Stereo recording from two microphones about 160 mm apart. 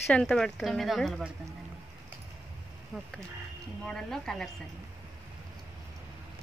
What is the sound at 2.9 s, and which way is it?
Speech, centre (ahead or behind).